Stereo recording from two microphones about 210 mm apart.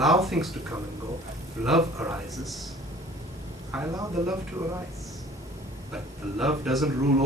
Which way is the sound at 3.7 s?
15° right (ahead or behind).